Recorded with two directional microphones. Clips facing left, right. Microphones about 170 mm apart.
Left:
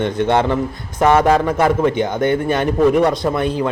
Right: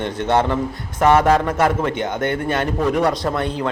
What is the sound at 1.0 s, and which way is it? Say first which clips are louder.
A man's voice: left 1 dB; 10° left (ahead or behind).